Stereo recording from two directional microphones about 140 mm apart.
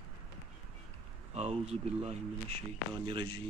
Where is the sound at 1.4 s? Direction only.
50° right (ahead or behind).